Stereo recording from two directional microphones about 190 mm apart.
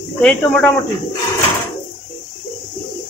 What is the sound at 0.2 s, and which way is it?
Speech, 5° left (ahead or behind).